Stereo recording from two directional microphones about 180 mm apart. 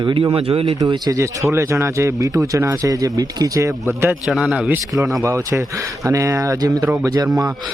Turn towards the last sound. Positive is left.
turn(degrees=-20)  # may be behind; listen again after turning